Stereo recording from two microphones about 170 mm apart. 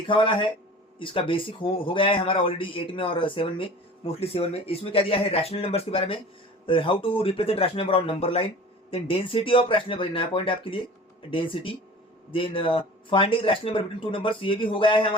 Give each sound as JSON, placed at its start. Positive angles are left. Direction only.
{"t": 0.1, "sound": "speech", "side_deg": 30}